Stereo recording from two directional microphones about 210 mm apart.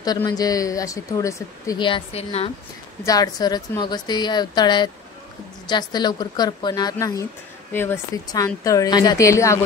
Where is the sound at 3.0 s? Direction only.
15° left (ahead or behind).